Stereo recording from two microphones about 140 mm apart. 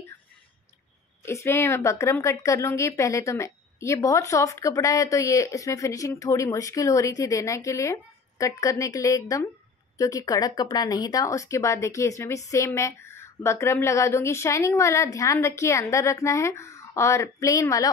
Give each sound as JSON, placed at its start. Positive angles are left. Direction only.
{"t": 1.2, "sound": "speech", "side_deg": 20}